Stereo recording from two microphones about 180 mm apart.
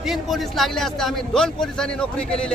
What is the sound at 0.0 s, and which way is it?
Speech, centre (ahead or behind).